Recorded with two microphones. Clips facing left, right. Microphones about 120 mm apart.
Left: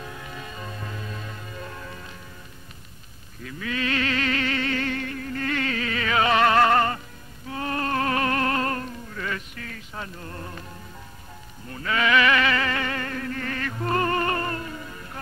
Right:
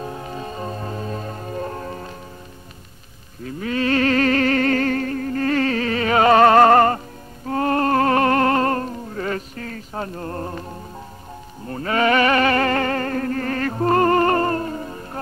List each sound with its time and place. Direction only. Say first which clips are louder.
0.0 s music: right 8 dB; 35° right (ahead or behind)
3.4 s music: right 7 dB; 35° right (ahead or behind)